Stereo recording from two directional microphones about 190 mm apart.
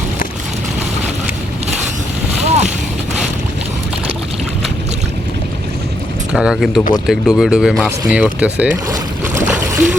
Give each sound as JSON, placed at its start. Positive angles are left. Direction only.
{"t": 2.4, "sound": "boat", "side_deg": -35}
{"t": 6.3, "sound": "speech", "side_deg": -5}
{"t": 8.9, "sound": "a sound", "side_deg": -10}